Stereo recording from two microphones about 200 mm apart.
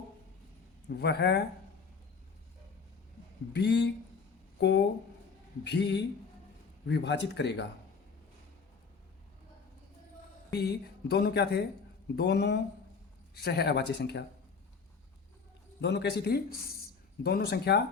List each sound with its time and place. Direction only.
0.9 s speech: 55° left (ahead or behind)
3.5 s speech: 60° left (ahead or behind)
10.5 s speech: 55° left (ahead or behind)
15.8 s speech: 60° left (ahead or behind)